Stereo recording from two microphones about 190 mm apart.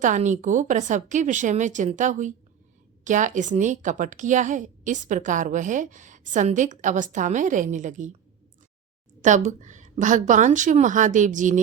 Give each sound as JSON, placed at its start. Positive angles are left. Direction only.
{"t": 0.0, "sound": "a woman's voice", "side_deg": -40}
{"t": 9.2, "sound": "a woman's voice", "side_deg": -40}